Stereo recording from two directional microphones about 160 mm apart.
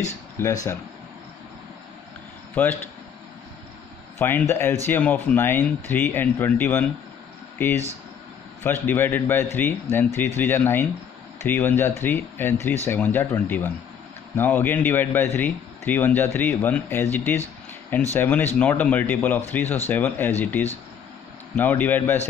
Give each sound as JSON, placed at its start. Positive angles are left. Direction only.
{"t": 0.4, "sound": "a man's voice", "side_deg": 15}
{"t": 4.2, "sound": "a man's voice", "side_deg": 15}